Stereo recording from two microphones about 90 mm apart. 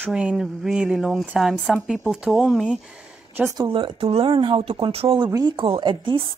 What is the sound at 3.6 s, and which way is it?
Speech, 80° right.